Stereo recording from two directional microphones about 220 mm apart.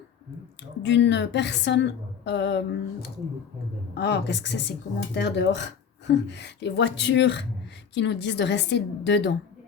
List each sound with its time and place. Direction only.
0.8 s a woman's voice: 55° left (ahead or behind)